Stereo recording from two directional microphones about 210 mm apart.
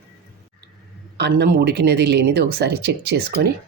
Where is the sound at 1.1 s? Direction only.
55° right (ahead or behind).